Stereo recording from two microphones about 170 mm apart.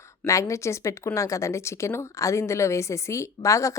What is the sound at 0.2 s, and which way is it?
Speech, 15° left (ahead or behind).